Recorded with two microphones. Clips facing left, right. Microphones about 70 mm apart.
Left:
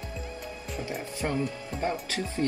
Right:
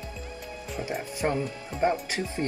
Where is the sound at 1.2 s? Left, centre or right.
Right.